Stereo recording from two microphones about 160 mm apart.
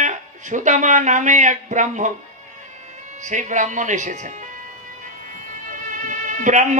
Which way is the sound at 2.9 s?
50° right (ahead or behind).